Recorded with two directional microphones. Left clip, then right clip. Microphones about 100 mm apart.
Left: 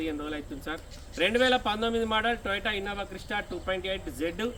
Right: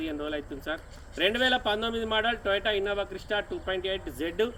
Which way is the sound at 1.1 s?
45° left (ahead or behind).